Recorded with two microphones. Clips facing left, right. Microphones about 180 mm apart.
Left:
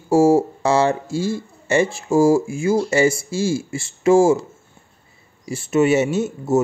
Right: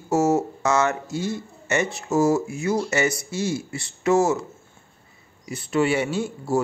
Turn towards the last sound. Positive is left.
turn(degrees=20)  # may be behind; listen again after turning